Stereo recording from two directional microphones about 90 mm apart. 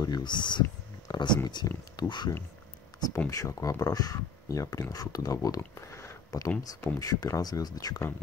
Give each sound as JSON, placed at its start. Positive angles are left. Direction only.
{"t": 0.0, "sound": "speech", "side_deg": 50}
{"t": 1.0, "sound": "a sound", "side_deg": 50}
{"t": 1.5, "sound": "speech", "side_deg": 55}
{"t": 3.3, "sound": "speech", "side_deg": 35}
{"t": 5.8, "sound": "a sound", "side_deg": 30}
{"t": 6.6, "sound": "speech", "side_deg": 40}